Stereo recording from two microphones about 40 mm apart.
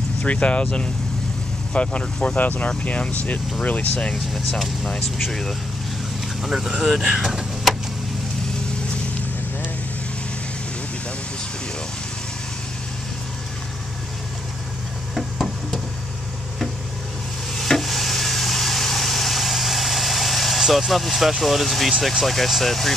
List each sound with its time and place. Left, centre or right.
0.2 s speech: left
2.2 s speech: left
4.3 s speech: centre
4.8 s speech: centre
6.4 s speech: centre
6.8 s speech: centre
7.1 s speech: centre
15.1 s a sound: centre
17.6 s vehicle: centre
20.7 s speech: centre